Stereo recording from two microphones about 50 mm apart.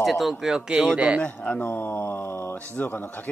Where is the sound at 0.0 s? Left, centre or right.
Centre.